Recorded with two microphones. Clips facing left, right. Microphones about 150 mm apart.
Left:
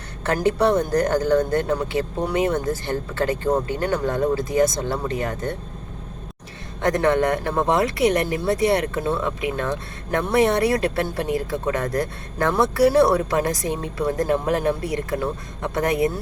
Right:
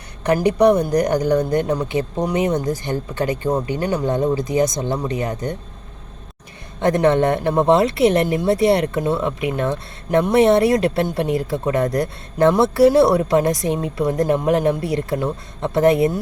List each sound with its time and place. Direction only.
0.3 s speech: 15° right (ahead or behind)
6.8 s speech: 20° right (ahead or behind)